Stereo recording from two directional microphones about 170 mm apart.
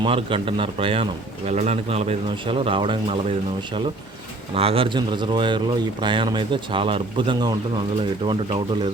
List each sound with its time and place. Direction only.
0.0 s speech: 30° right (ahead or behind)
4.5 s speech: 35° right (ahead or behind)